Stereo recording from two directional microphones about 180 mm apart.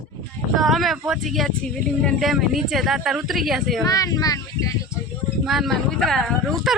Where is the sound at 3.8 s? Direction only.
20° left (ahead or behind).